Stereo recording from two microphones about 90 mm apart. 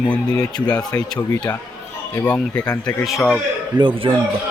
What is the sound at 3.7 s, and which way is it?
Speech, 60° right (ahead or behind).